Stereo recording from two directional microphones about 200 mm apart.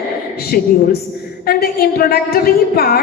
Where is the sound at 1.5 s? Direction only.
50° left (ahead or behind).